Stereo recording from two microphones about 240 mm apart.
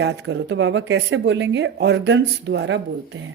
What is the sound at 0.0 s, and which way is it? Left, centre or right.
Speech, right.